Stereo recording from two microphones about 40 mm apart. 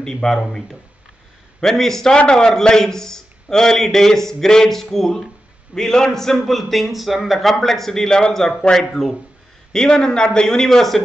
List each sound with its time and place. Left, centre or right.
0.0 s a man's voice: centre
2.1 s a man's voice: centre
6.3 s a man's voice: centre